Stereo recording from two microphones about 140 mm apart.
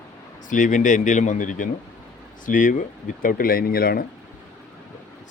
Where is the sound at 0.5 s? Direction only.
65° left (ahead or behind); by 4.0 s 90° left.